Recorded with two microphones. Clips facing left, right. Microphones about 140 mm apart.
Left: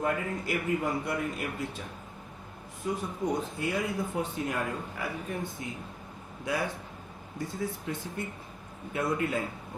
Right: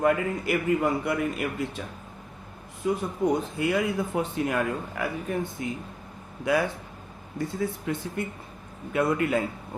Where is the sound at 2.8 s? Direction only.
75° right (ahead or behind).